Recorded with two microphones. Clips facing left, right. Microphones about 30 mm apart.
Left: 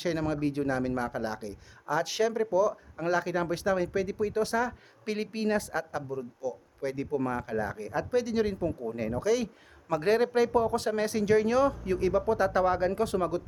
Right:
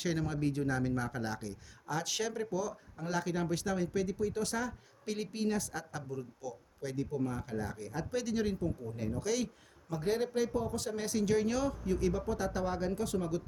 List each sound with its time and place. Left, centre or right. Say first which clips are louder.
0.0 s speech: left 5 dB; left
8.6 s speech: left 6 dB; left
9.2 s speech: left 7 dB; centre
9.9 s speech: left 8 dB; left
11.2 s speech: left 7 dB; left
11.9 s speech: left 6 dB; left
12.9 s speech: left 6 dB; left